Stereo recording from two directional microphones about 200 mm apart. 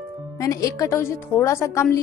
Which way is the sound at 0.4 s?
15° left (ahead or behind).